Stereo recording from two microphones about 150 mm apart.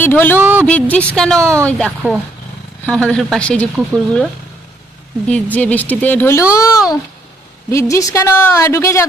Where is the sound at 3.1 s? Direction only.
5° left (ahead or behind).